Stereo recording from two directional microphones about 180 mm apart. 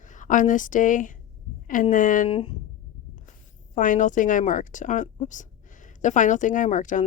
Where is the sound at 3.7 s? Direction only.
45° left (ahead or behind).